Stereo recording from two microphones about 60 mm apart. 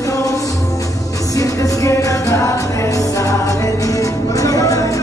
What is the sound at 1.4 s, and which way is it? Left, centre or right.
Music, left.